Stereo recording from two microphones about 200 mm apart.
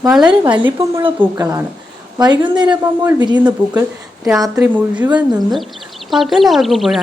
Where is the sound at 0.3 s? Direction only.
25° right (ahead or behind).